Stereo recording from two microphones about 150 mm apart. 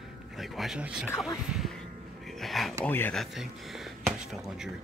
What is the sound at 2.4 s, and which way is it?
Speech, centre (ahead or behind).